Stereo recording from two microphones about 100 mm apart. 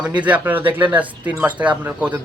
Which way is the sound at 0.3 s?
20° right (ahead or behind).